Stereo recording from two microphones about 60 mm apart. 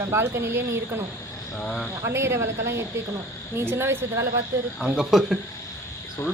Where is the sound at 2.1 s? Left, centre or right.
Right.